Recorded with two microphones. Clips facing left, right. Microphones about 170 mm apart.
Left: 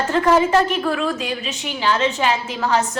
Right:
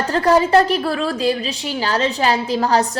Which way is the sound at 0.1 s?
35° right (ahead or behind).